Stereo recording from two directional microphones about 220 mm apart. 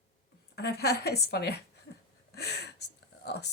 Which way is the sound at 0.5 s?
45° left (ahead or behind).